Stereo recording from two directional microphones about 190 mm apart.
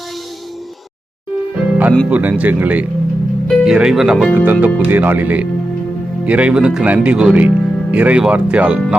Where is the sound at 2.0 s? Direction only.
10° right (ahead or behind).